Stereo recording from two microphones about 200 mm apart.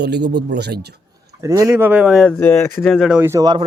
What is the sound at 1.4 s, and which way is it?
Speech, 15° right (ahead or behind).